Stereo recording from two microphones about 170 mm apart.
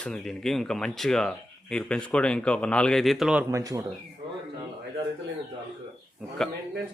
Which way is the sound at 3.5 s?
20° right (ahead or behind).